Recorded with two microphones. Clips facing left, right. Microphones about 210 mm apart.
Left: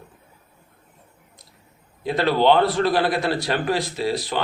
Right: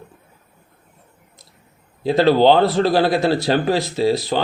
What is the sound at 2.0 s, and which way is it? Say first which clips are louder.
Speech: right 5 dB; 30° right (ahead or behind).